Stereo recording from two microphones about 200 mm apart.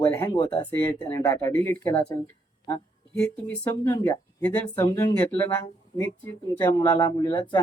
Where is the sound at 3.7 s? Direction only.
15° left (ahead or behind).